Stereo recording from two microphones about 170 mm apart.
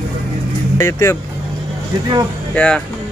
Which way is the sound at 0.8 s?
15° left (ahead or behind).